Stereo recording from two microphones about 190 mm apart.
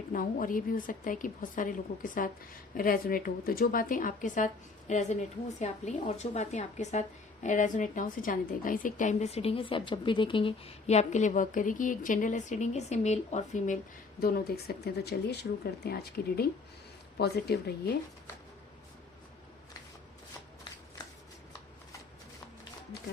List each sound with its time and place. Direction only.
0.1 s a woman's voice: 45° left (ahead or behind)
14.2 s speech: 50° left (ahead or behind)